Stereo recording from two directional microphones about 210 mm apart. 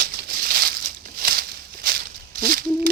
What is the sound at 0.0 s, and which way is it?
Crumpling, 45° right (ahead or behind).